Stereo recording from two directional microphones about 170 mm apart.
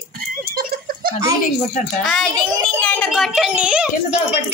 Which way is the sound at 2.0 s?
5° left (ahead or behind).